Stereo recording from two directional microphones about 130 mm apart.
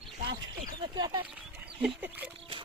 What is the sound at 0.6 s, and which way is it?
Speech, 35° right (ahead or behind).